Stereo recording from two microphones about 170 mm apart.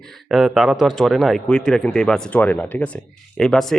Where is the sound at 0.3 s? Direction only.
Centre (ahead or behind).